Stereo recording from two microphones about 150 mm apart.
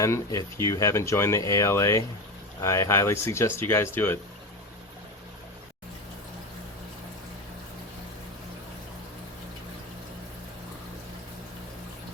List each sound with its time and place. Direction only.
0.0 s speech: 20° left (ahead or behind)